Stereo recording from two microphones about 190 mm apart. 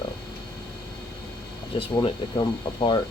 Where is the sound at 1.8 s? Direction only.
25° left (ahead or behind).